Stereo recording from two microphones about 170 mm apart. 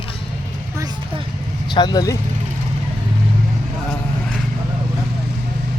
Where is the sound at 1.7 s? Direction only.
25° left (ahead or behind).